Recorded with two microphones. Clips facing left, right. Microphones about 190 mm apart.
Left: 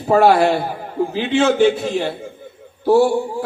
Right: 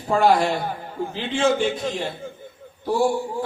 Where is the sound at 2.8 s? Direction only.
70° left (ahead or behind).